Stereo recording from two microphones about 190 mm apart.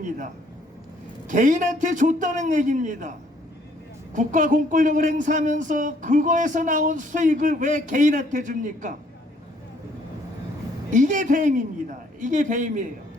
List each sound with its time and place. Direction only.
1.3 s speech: 40° right (ahead or behind)
4.1 s speech: 40° right (ahead or behind)
10.9 s speech: 40° right (ahead or behind)